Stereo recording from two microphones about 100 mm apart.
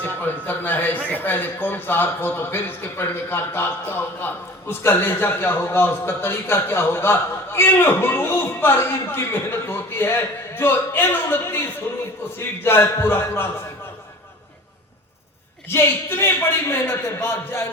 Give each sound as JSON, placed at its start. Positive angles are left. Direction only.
{"t": 0.0, "sound": "a man's voice", "side_deg": 20}
{"t": 12.6, "sound": "a man's voice", "side_deg": 25}
{"t": 15.7, "sound": "a man's voice", "side_deg": 25}